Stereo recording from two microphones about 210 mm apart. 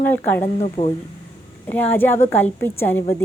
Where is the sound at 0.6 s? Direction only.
30° left (ahead or behind).